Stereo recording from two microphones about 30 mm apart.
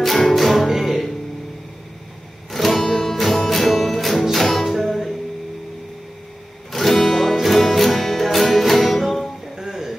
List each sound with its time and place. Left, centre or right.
0.0 s music: centre
2.5 s music: centre
4.6 s music: centre
6.7 s music: centre
9.6 s a sound: right